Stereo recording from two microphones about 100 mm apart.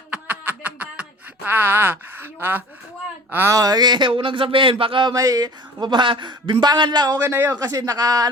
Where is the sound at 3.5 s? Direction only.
40° right (ahead or behind); by 5.1 s 60° right (ahead or behind).